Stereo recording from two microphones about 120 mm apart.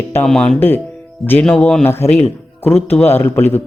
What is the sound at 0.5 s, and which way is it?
Speech, 15° left (ahead or behind).